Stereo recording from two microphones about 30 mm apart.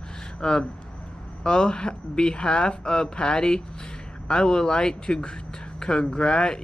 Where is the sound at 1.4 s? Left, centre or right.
Left.